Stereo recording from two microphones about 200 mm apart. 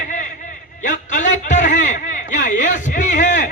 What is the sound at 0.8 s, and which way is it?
A man's voice, 40° left (ahead or behind).